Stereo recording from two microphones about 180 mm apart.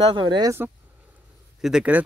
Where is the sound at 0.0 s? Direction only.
25° right (ahead or behind).